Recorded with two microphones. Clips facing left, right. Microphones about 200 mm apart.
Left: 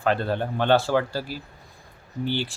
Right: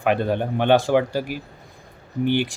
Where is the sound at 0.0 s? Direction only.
15° right (ahead or behind).